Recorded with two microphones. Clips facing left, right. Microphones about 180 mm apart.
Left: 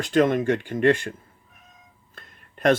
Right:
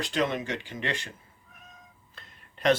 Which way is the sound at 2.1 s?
50° left (ahead or behind).